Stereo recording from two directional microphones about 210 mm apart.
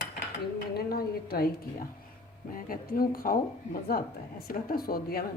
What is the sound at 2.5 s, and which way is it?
Speech, 45° left (ahead or behind).